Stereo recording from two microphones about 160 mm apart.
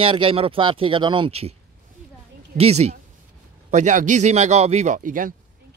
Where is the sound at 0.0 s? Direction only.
35° right (ahead or behind).